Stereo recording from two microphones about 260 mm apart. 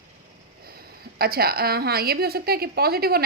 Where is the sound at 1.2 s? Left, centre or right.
Right.